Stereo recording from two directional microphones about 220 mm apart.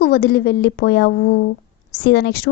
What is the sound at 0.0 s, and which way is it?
A woman's voice, 45° left (ahead or behind).